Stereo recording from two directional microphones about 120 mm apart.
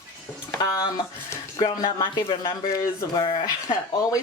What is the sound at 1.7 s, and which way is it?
Speech, 40° left (ahead or behind).